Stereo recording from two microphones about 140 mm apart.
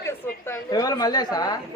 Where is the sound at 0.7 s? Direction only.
25° left (ahead or behind).